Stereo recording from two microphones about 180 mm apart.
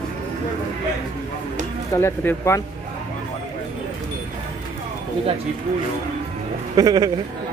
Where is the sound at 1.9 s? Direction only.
15° left (ahead or behind).